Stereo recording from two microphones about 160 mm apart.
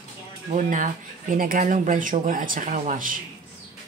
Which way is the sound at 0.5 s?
55° right (ahead or behind).